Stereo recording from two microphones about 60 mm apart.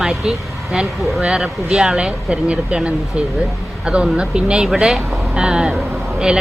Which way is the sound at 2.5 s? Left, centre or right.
Centre.